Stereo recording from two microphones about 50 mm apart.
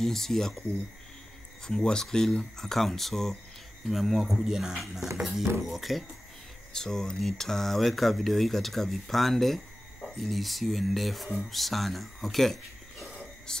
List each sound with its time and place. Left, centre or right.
0.0 s speech: centre
1.7 s speech: centre
6.7 s speech: centre
13.5 s speech: centre